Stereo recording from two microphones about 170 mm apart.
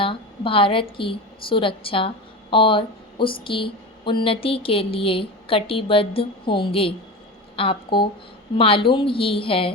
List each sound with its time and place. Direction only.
0.0 s a woman's voice: 30° left (ahead or behind)